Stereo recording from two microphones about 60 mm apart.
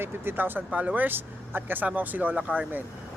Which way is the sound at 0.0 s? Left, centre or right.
Right.